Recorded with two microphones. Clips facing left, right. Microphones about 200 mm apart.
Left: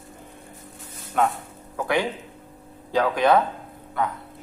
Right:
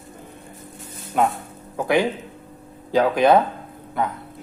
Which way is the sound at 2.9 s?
15° right (ahead or behind).